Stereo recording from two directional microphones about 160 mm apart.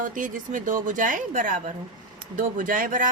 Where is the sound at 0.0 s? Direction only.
55° right (ahead or behind).